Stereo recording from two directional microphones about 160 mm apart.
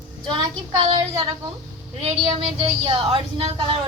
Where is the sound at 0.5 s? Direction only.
25° right (ahead or behind).